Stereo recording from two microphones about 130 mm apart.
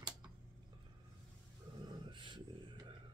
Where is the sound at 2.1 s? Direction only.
40° right (ahead or behind).